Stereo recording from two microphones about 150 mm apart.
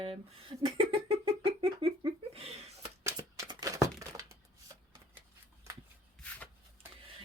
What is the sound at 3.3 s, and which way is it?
Crumpling, 20° right (ahead or behind).